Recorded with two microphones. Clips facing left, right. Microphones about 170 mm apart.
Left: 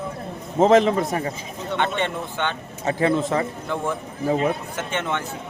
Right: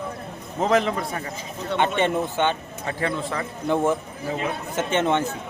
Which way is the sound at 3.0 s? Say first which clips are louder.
Left 6 dB; 25° left (ahead or behind).